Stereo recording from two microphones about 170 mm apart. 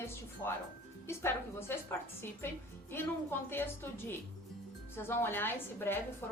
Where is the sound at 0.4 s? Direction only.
15° left (ahead or behind).